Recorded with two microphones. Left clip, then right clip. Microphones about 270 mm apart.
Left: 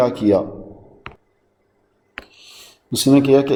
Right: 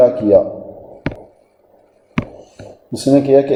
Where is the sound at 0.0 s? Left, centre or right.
Left.